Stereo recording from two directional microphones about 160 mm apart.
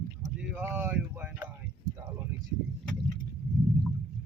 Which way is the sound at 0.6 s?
15° right (ahead or behind).